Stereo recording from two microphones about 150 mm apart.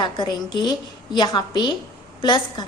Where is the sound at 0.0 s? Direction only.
30° left (ahead or behind).